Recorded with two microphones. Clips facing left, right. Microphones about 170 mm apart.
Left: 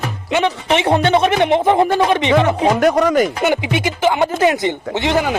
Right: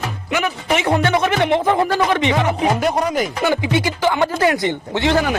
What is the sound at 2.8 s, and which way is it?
Speech, 60° left (ahead or behind).